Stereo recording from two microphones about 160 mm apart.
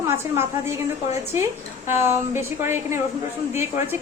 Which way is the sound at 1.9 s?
15° right (ahead or behind).